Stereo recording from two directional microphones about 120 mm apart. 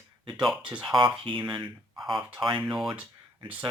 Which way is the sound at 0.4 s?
10° right (ahead or behind).